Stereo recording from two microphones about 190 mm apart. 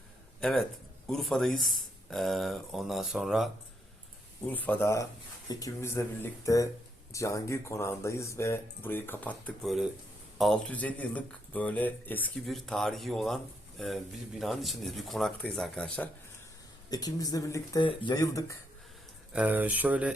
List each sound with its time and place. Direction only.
0.3 s speech: centre (ahead or behind)
16.9 s speech: 20° left (ahead or behind)
19.3 s speech: 5° right (ahead or behind)